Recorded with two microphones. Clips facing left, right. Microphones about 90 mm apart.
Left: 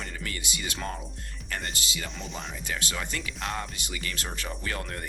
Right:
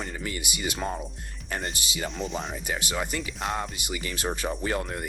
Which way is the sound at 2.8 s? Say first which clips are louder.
Right 4 dB; 15° right (ahead or behind).